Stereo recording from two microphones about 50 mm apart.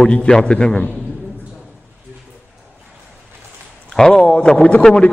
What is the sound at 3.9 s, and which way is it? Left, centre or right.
Speech, centre.